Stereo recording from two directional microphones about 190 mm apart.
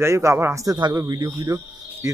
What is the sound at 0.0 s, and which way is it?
A man's voice, 15° right (ahead or behind).